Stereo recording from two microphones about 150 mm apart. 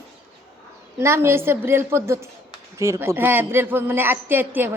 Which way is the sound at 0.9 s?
15° right (ahead or behind).